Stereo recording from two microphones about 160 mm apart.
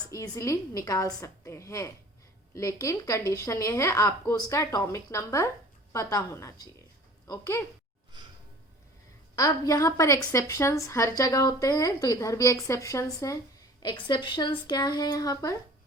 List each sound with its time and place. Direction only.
0.1 s a woman's voice: 20° left (ahead or behind)
9.3 s a woman's voice: 20° left (ahead or behind)